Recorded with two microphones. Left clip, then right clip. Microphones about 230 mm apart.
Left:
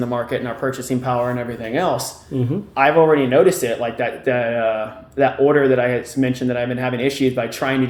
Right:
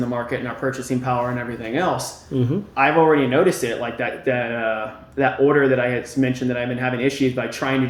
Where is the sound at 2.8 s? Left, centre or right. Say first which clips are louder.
Left 2 dB; left.